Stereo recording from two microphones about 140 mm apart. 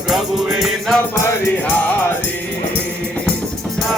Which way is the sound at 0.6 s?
Centre (ahead or behind).